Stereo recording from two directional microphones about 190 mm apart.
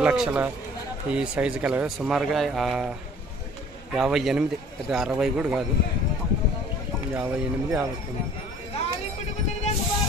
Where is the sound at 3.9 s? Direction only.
Centre (ahead or behind).